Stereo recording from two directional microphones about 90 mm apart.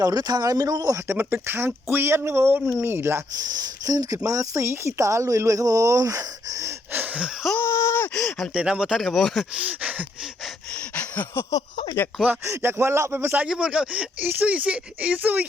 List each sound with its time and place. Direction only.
0.0 s speech: 50° right (ahead or behind)
0.9 s speech: 30° right (ahead or behind)
3.3 s speech: 45° right (ahead or behind)
6.9 s gasp: 20° right (ahead or behind)
7.5 s a sound: 30° left (ahead or behind)
8.1 s gasp: 5° left (ahead or behind)
8.5 s speech: 10° right (ahead or behind)
9.0 s speech: centre (ahead or behind)
9.6 s a sound: 15° right (ahead or behind)
10.9 s a sound: 20° left (ahead or behind)
12.5 s speech: 30° right (ahead or behind)